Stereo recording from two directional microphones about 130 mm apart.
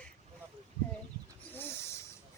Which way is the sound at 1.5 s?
15° left (ahead or behind).